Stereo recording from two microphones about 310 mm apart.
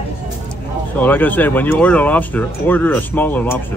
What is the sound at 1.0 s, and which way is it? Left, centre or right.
Speech, centre.